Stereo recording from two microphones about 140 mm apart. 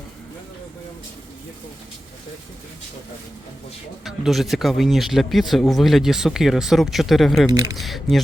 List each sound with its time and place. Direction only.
4.0 s speech: centre (ahead or behind)
7.5 s speech: 25° right (ahead or behind)
7.8 s speech: centre (ahead or behind)